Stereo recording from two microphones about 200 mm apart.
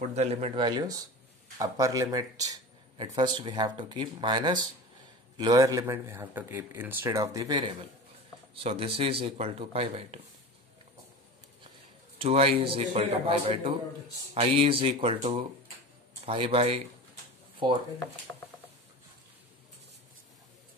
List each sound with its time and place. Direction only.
0.1 s a man's voice: 35° right (ahead or behind)
12.2 s speech: 30° right (ahead or behind)